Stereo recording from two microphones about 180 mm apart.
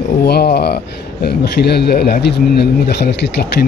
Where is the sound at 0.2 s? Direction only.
60° left (ahead or behind).